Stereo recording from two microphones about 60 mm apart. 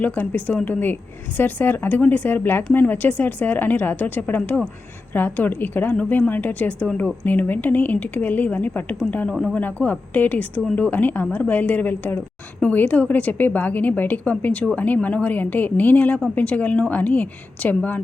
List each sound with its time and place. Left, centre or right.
0.0 s a woman's voice: left